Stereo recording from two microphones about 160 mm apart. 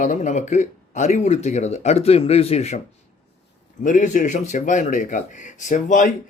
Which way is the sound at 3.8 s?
50° left (ahead or behind).